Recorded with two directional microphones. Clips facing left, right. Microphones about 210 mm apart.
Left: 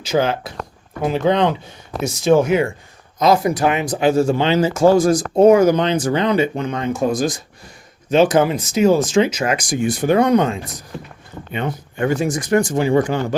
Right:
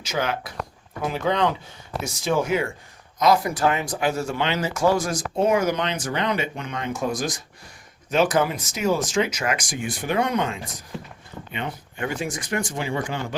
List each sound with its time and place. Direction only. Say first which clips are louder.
0.0 s speech: left 8 dB; 30° left (ahead or behind)